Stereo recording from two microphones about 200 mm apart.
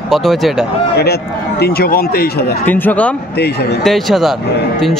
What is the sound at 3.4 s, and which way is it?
Speech, 55° left (ahead or behind).